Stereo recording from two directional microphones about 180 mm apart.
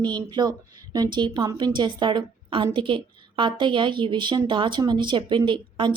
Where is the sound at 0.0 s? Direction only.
25° right (ahead or behind).